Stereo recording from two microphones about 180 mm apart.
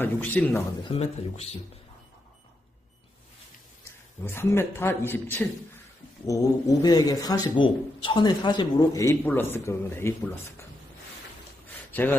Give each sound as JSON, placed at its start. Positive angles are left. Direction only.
{"t": 0.0, "sound": "a man's voice", "side_deg": 10}
{"t": 0.8, "sound": "speech", "side_deg": 35}
{"t": 4.2, "sound": "a man's voice", "side_deg": 15}
{"t": 11.9, "sound": "speech", "side_deg": 10}